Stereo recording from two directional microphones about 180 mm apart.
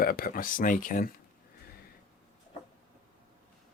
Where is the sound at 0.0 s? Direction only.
55° left (ahead or behind).